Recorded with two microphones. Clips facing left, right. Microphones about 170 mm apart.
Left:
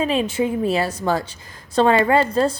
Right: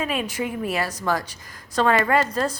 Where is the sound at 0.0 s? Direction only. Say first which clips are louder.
Left 6 dB; 30° left (ahead or behind).